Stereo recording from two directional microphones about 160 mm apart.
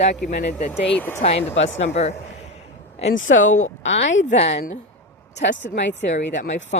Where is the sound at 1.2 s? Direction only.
40° left (ahead or behind).